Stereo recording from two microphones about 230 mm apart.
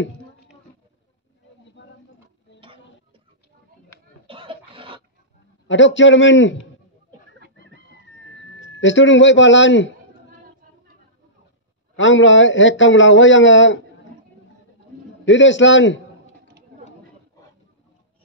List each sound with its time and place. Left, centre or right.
1.8 s a sound: left
4.3 s a sound: right
5.7 s a man's voice: left
8.4 s speech: left
12.0 s a man's voice: left
15.2 s a man's voice: left